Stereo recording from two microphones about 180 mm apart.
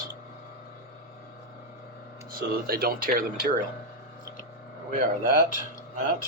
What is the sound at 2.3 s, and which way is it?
Speech, 55° right (ahead or behind).